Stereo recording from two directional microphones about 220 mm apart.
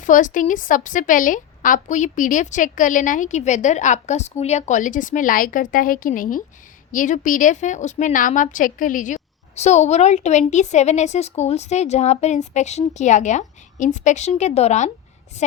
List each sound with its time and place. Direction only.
0.0 s a woman's voice: 35° left (ahead or behind)